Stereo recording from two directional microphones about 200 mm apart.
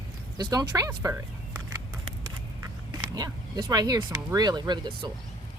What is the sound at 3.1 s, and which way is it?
Speech, 20° right (ahead or behind).